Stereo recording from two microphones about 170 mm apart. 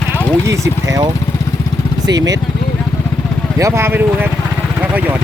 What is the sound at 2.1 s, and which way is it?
Speech, 20° right (ahead or behind).